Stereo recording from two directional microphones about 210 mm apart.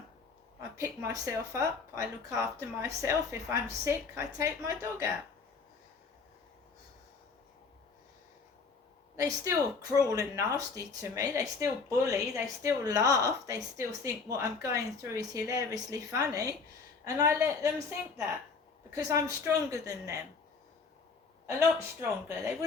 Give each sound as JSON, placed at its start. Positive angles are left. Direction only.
{"t": 0.8, "sound": "speech", "side_deg": -15}
{"t": 9.1, "sound": "speech", "side_deg": -15}
{"t": 18.9, "sound": "speech", "side_deg": -15}
{"t": 21.4, "sound": "speech", "side_deg": -10}